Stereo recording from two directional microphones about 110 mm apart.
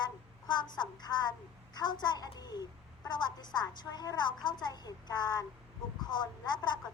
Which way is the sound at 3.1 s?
40° left (ahead or behind).